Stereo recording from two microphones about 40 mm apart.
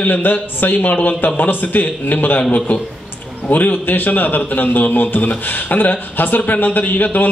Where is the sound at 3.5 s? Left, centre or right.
Left.